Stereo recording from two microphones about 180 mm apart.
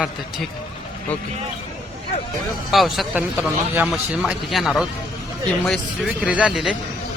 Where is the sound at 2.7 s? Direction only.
Centre (ahead or behind).